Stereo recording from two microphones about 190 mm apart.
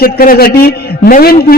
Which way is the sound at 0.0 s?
50° left (ahead or behind).